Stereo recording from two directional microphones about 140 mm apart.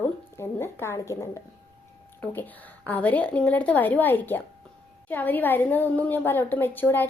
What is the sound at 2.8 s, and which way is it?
A woman's voice, 10° left (ahead or behind).